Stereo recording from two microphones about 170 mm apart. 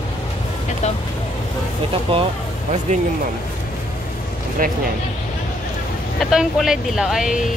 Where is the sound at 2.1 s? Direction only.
30° right (ahead or behind).